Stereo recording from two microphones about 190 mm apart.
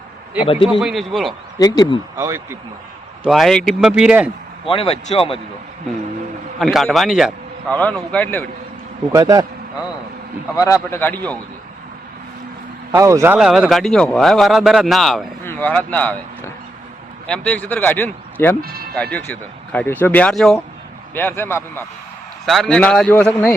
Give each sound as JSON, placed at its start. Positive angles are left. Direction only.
{"t": 0.4, "sound": "speech", "side_deg": 30}
{"t": 0.7, "sound": "a man's voice", "side_deg": 0}
{"t": 1.5, "sound": "speech", "side_deg": 20}
{"t": 2.1, "sound": "speech", "side_deg": -15}
{"t": 3.2, "sound": "a man's voice", "side_deg": 0}
{"t": 4.7, "sound": "speech", "side_deg": 30}
{"t": 6.6, "sound": "a man's voice", "side_deg": 0}
{"t": 9.1, "sound": "speech", "side_deg": -20}
{"t": 10.5, "sound": "speech", "side_deg": 15}
{"t": 12.9, "sound": "a man's voice", "side_deg": -15}
{"t": 17.2, "sound": "speech", "side_deg": 5}
{"t": 18.6, "sound": "speech", "side_deg": -55}
{"t": 19.1, "sound": "speech", "side_deg": 10}
{"t": 22.4, "sound": "a man's voice", "side_deg": 0}